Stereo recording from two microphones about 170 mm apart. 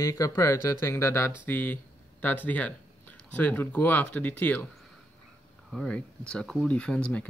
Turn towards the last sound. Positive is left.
turn(degrees=5)  # may be behind; listen again after turning